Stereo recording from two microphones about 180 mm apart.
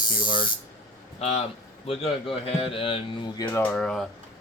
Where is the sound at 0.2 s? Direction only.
25° left (ahead or behind).